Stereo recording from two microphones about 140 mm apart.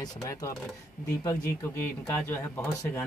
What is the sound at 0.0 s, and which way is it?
Speech, 25° left (ahead or behind).